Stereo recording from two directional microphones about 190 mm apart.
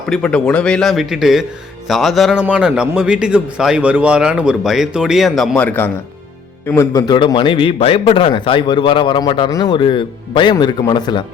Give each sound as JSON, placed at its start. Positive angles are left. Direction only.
{"t": 0.1, "sound": "a man's voice", "side_deg": 5}